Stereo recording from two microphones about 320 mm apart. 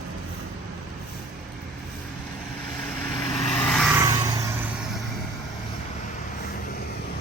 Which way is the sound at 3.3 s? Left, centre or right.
Centre.